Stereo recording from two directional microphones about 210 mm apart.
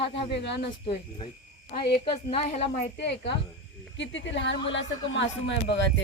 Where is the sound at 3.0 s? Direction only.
55° left (ahead or behind).